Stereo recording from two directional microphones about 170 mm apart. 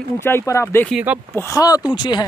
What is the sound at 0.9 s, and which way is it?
Speech, 5° right (ahead or behind).